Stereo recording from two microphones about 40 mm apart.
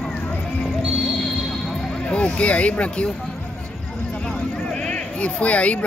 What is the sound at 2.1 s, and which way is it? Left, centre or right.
Speech, left.